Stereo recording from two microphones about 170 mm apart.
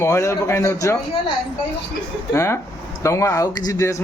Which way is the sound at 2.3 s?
15° left (ahead or behind).